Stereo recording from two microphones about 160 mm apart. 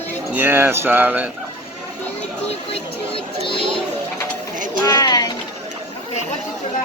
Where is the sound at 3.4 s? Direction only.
35° left (ahead or behind).